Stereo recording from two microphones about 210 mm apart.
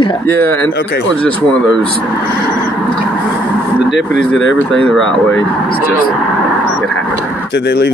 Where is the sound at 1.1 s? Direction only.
5° left (ahead or behind).